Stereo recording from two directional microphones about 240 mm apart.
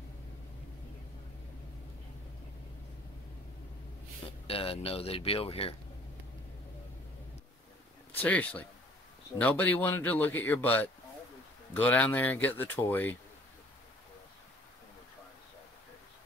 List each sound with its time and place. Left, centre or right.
4.5 s speech: left
8.1 s speech: centre